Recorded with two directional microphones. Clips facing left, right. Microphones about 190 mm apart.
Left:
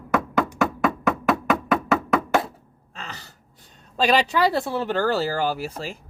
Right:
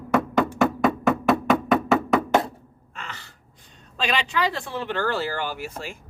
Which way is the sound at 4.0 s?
40° left (ahead or behind).